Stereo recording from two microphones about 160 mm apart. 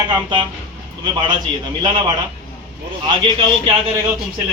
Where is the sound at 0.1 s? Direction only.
30° right (ahead or behind).